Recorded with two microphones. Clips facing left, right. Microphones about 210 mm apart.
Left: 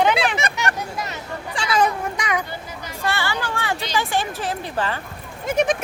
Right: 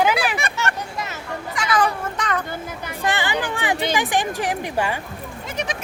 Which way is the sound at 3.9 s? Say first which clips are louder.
Right 2 dB; 15° right (ahead or behind).